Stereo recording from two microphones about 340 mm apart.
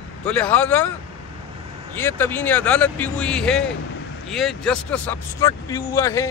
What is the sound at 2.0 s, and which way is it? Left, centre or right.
Speech, centre.